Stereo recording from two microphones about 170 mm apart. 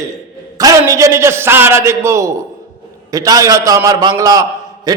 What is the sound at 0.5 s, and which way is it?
A man's voice, 20° right (ahead or behind).